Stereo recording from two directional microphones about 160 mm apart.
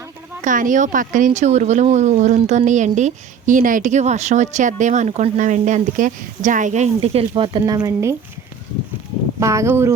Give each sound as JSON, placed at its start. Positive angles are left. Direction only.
{"t": 0.4, "sound": "speech", "side_deg": -55}
{"t": 7.6, "sound": "speech", "side_deg": -20}
{"t": 9.4, "sound": "speech", "side_deg": -20}